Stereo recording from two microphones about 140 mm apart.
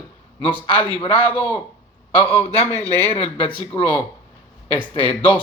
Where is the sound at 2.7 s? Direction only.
45° left (ahead or behind).